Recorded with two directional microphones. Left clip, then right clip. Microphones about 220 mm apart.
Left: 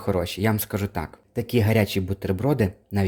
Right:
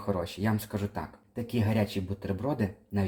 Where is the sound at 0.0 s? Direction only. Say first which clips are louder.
Left 7 dB; 50° left (ahead or behind).